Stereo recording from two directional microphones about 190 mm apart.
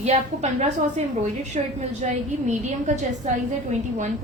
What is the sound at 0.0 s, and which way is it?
A woman's voice, 35° right (ahead or behind).